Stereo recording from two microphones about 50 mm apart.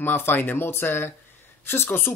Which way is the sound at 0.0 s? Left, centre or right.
Left.